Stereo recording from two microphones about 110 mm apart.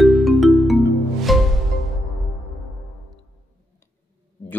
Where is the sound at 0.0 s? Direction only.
Centre (ahead or behind).